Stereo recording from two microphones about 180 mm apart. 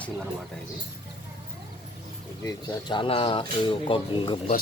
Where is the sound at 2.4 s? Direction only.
25° left (ahead or behind).